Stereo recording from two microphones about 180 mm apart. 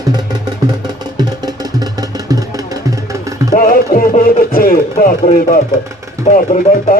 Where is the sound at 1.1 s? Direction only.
20° right (ahead or behind).